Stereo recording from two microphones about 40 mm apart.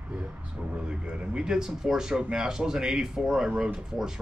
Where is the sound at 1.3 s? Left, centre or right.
Centre.